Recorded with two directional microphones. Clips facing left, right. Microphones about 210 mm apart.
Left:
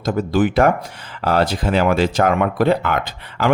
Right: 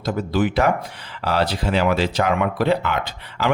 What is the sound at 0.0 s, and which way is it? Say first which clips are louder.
A man's voice: left 3 dB; 50° left (ahead or behind).